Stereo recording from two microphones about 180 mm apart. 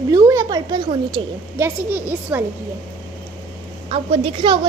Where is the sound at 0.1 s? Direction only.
15° right (ahead or behind).